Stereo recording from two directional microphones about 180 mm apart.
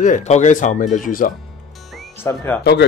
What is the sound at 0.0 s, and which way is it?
Speech, 40° left (ahead or behind).